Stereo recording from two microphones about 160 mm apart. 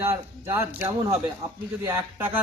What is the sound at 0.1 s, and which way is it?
A man's voice, 15° right (ahead or behind).